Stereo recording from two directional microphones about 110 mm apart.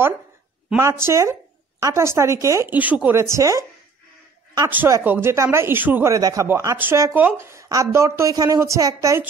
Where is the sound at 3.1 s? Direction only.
25° right (ahead or behind).